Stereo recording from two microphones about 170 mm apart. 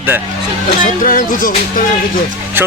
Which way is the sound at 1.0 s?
50° left (ahead or behind).